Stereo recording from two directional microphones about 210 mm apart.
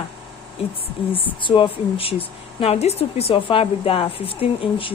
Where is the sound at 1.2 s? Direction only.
25° left (ahead or behind).